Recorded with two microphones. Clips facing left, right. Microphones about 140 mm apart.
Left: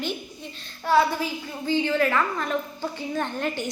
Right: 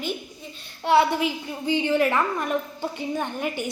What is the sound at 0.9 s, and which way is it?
A woman's voice, 15° right (ahead or behind).